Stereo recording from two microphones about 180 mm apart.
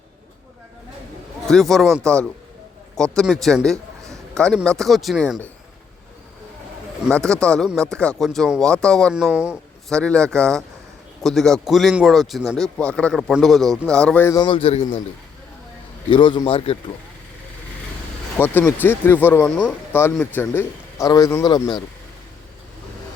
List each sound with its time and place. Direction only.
1.5 s a man's voice: centre (ahead or behind)
7.1 s a man's voice: 5° left (ahead or behind)
10.0 s a man's voice: 5° left (ahead or behind)
14.4 s a man's voice: 30° left (ahead or behind)
16.0 s a man's voice: 25° left (ahead or behind)
18.3 s speech: 10° left (ahead or behind)